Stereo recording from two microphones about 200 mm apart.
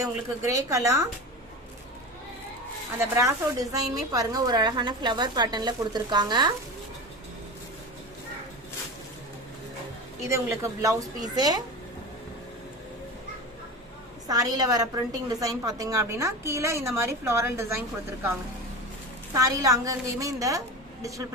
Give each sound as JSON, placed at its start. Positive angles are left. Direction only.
{"t": 0.0, "sound": "a woman's voice", "side_deg": -15}
{"t": 3.0, "sound": "a woman's voice", "side_deg": -15}
{"t": 10.2, "sound": "a woman's voice", "side_deg": -15}
{"t": 14.3, "sound": "a woman's voice", "side_deg": -20}
{"t": 19.3, "sound": "a woman's voice", "side_deg": -15}